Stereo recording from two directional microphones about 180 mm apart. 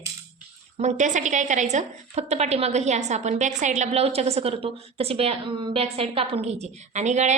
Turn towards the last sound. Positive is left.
turn(degrees=-40)  # may be behind; listen again after turning